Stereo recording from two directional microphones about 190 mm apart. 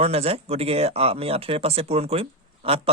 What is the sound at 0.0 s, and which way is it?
Speech, 30° right (ahead or behind).